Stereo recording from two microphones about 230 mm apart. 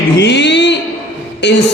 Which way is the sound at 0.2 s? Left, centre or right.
Left.